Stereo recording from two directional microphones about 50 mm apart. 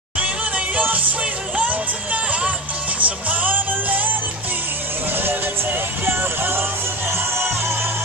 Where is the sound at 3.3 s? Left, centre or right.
Right.